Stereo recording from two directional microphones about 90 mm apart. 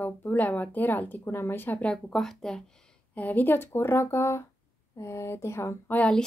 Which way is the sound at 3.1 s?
20° left (ahead or behind).